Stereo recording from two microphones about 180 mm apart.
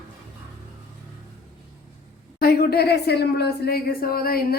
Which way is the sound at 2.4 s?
60° left (ahead or behind).